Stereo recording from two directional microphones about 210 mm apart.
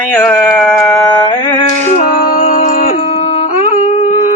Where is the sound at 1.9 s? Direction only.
35° left (ahead or behind).